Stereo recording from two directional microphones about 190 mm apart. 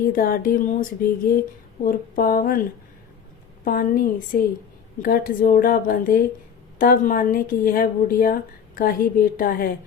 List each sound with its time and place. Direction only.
0.0 s a woman's voice: 50° left (ahead or behind)
3.6 s a woman's voice: 50° left (ahead or behind)